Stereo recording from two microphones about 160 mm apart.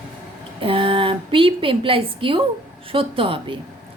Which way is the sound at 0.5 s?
35° right (ahead or behind).